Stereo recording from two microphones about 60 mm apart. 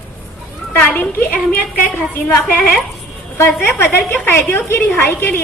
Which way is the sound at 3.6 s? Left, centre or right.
Left.